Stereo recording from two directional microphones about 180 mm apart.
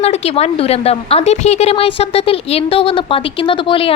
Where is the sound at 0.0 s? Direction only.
35° left (ahead or behind).